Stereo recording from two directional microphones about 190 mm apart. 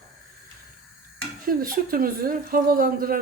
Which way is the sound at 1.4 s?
45° right (ahead or behind).